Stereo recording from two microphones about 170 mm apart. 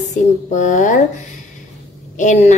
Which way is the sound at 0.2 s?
45° left (ahead or behind).